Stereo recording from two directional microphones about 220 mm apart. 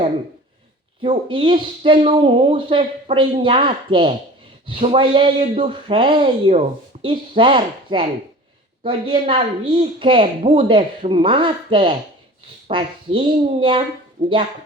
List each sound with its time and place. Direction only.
1.0 s speech: 25° right (ahead or behind)